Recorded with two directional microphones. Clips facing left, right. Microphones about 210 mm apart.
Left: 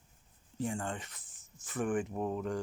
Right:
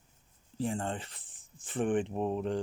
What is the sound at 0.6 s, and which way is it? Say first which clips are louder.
Speech: right 3 dB; 30° right (ahead or behind).